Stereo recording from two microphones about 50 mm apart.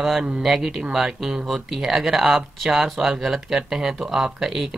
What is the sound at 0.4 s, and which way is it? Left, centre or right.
Speech, centre.